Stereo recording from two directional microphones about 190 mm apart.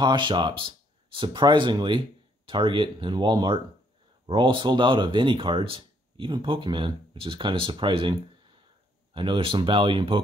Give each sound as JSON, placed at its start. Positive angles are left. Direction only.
{"t": 0.0, "sound": "speech", "side_deg": -25}